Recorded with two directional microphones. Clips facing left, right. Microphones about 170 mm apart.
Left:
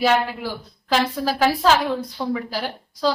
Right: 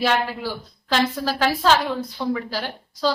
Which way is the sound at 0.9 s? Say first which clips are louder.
Left 1 dB; 5° left (ahead or behind).